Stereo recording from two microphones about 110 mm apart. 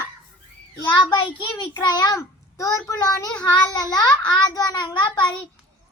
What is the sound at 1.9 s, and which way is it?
A child's voice, 35° left (ahead or behind).